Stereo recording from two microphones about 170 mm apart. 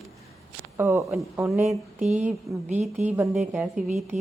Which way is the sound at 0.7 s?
20° right (ahead or behind).